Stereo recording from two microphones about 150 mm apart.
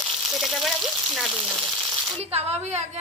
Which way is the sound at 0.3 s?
Centre (ahead or behind).